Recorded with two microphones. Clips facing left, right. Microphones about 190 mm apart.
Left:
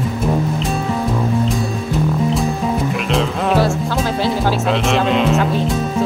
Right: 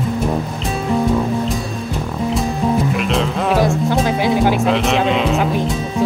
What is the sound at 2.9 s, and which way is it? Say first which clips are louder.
Music: even; centre (ahead or behind).